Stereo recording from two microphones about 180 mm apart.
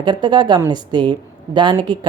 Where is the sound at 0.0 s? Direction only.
25° right (ahead or behind).